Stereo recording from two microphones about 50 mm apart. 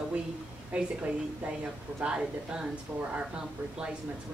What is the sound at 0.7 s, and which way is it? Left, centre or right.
A woman's voice, right.